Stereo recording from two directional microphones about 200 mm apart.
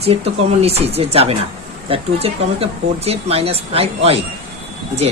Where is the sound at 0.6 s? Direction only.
30° right (ahead or behind).